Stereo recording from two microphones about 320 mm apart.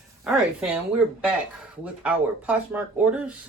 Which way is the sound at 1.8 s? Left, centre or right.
Centre.